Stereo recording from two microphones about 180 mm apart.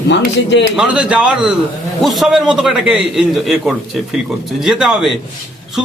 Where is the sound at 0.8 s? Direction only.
5° right (ahead or behind).